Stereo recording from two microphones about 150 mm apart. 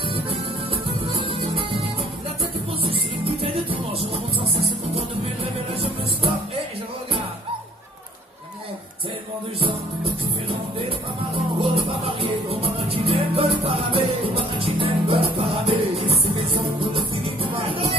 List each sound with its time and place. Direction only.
0.8 s music: 40° right (ahead or behind)
2.8 s music: 40° right (ahead or behind)
11.6 s music: 40° right (ahead or behind)